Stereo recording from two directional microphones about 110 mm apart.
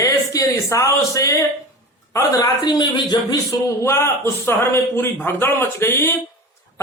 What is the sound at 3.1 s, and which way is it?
Speech, 40° left (ahead or behind).